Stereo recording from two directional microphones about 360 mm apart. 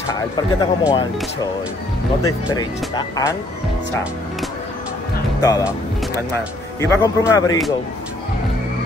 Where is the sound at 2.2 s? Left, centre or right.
Centre.